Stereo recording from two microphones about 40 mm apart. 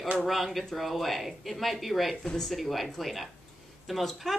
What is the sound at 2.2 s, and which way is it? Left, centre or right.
Speech, centre.